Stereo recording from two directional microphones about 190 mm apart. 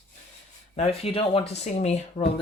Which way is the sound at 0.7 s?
30° left (ahead or behind).